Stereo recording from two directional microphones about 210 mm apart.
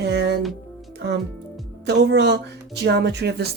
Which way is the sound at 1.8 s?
55° right (ahead or behind).